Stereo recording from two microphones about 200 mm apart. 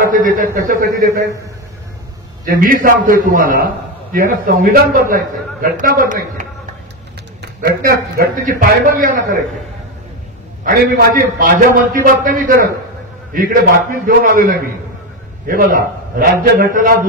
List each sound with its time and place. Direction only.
0.0 s a man's voice: 45° right (ahead or behind)
2.4 s a man's voice: 45° right (ahead or behind)
7.4 s a man's voice: 50° right (ahead or behind)
10.6 s a man's voice: 45° right (ahead or behind)